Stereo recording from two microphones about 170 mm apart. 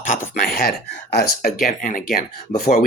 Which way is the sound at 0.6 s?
65° left (ahead or behind).